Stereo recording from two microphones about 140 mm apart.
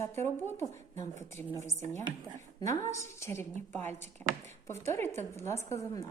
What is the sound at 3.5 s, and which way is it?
Speech, 55° right (ahead or behind).